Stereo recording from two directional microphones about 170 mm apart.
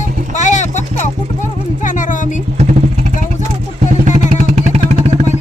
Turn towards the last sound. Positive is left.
turn(degrees=-40)  # may be behind; listen again after turning